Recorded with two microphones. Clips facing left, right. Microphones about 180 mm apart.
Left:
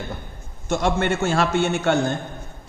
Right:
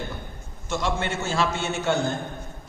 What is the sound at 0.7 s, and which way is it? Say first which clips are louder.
A man's voice: left 6 dB; 55° left (ahead or behind).